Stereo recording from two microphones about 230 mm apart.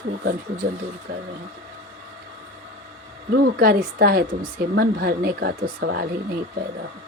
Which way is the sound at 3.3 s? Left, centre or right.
Right.